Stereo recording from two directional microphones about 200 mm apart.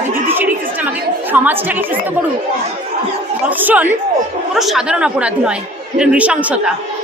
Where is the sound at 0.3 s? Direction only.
10° right (ahead or behind).